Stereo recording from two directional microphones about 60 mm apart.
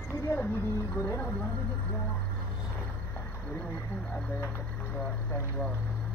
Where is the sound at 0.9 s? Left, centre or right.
Left.